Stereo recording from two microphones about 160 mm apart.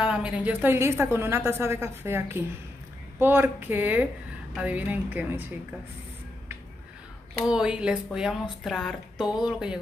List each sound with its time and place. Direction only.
0.0 s a woman's voice: 5° right (ahead or behind)
7.4 s speech: 5° right (ahead or behind)